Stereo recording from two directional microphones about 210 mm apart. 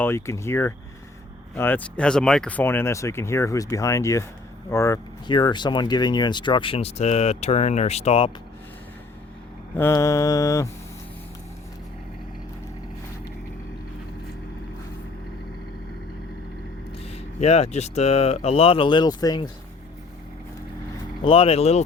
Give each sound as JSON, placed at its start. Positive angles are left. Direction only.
{"t": 0.0, "sound": "speech", "side_deg": 15}
{"t": 9.7, "sound": "speech", "side_deg": 15}
{"t": 17.0, "sound": "speech", "side_deg": 30}
{"t": 21.2, "sound": "speech", "side_deg": 25}